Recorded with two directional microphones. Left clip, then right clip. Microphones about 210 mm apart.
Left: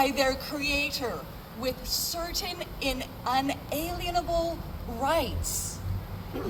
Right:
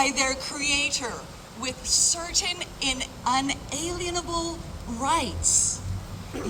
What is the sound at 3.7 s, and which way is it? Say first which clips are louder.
Speech: even; 25° left (ahead or behind).